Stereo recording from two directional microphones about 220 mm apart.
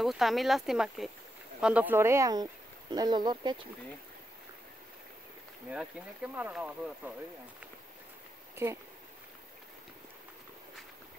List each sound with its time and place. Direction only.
0.0 s speech: centre (ahead or behind); by 3.6 s 20° right (ahead or behind)
5.7 s speech: 5° right (ahead or behind)